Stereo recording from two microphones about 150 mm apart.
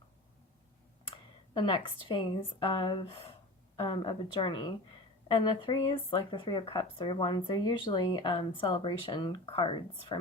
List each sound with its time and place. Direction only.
1.0 s speech: 30° left (ahead or behind)